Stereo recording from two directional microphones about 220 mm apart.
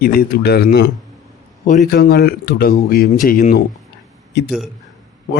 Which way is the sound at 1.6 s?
35° left (ahead or behind).